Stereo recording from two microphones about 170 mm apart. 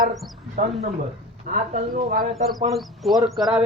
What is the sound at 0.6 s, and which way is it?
Speech, 45° right (ahead or behind).